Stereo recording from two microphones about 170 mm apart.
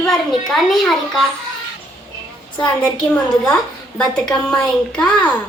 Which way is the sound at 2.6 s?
25° left (ahead or behind).